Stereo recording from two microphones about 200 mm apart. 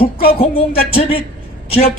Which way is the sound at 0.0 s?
30° left (ahead or behind).